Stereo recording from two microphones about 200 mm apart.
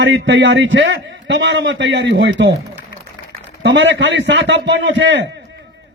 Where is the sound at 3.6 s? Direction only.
65° right (ahead or behind).